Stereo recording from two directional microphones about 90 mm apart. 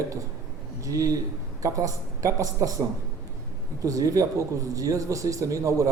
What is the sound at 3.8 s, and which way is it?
Speech, 40° right (ahead or behind).